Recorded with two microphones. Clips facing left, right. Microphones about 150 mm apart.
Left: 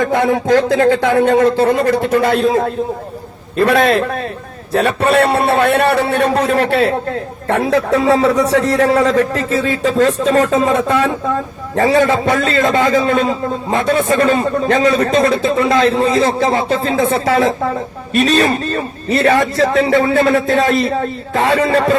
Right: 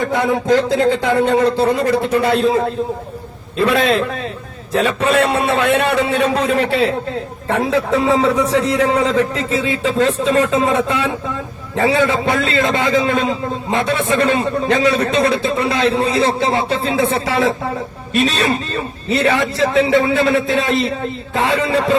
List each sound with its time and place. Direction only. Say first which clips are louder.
0.0 s a man's voice: left 3 dB; 50° left (ahead or behind)
6.3 s a man's voice: left 2 dB; 45° left (ahead or behind)
7.4 s a man's voice: left 3 dB; 65° left (ahead or behind)
9.1 s a man's voice: left 2 dB; 50° left (ahead or behind)